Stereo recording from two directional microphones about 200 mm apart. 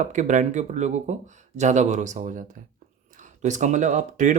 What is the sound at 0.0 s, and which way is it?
Speech, 40° right (ahead or behind).